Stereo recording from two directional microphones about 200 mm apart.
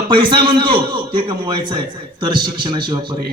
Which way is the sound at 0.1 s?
25° right (ahead or behind).